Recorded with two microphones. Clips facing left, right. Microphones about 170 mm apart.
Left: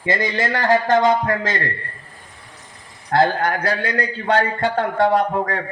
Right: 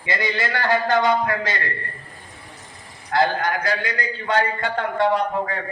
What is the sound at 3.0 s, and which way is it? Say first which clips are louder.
A man's voice: left 3 dB; 50° left (ahead or behind).